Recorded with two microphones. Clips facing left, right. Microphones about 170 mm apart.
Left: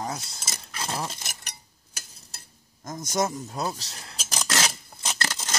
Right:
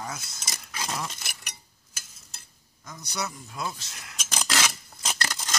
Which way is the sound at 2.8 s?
45° left (ahead or behind).